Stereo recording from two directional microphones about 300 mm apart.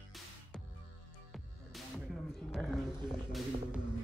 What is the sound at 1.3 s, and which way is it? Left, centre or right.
Music, centre.